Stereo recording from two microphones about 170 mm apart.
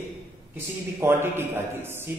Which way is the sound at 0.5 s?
15° right (ahead or behind).